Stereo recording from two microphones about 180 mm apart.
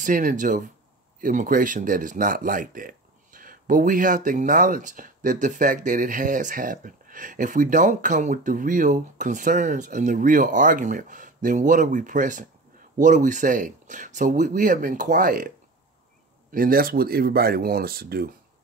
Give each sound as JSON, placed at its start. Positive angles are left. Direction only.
{"t": 0.0, "sound": "speech", "side_deg": -45}
{"t": 16.5, "sound": "speech", "side_deg": -55}